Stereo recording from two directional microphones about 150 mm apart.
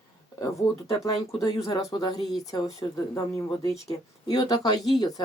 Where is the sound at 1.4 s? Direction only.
20° left (ahead or behind).